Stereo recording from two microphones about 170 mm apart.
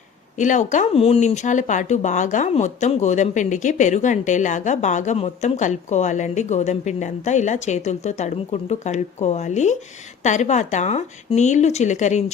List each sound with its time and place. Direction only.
0.3 s speech: 45° left (ahead or behind)